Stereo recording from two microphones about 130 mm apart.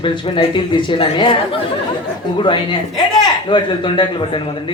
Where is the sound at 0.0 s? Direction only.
40° left (ahead or behind).